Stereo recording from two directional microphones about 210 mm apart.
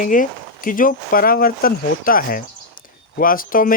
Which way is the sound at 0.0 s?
40° left (ahead or behind).